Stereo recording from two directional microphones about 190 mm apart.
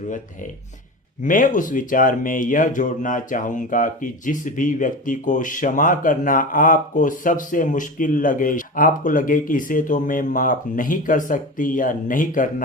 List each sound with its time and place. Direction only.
1.2 s speech: 45° left (ahead or behind)